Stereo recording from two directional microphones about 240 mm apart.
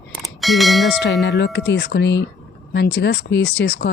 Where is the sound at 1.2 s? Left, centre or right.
Left.